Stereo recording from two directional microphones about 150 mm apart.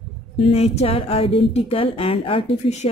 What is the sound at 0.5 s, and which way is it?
Speech, 45° left (ahead or behind).